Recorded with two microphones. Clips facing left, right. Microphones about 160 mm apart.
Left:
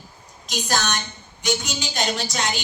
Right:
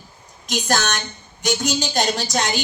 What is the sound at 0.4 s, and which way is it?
A woman's voice, 50° right (ahead or behind).